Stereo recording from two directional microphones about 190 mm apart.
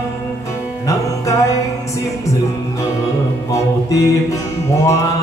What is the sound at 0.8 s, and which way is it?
Music, 15° left (ahead or behind).